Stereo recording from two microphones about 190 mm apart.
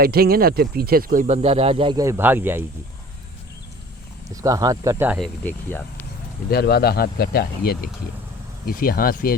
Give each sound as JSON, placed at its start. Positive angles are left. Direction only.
{"t": 0.0, "sound": "speech", "side_deg": -55}
{"t": 4.4, "sound": "speech", "side_deg": -20}
{"t": 5.2, "sound": "speech", "side_deg": 10}
{"t": 6.5, "sound": "speech", "side_deg": 55}